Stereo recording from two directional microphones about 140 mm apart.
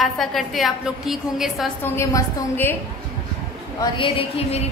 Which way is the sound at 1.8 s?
15° left (ahead or behind).